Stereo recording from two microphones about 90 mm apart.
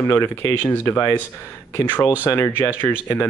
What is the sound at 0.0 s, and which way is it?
Speech, 25° left (ahead or behind).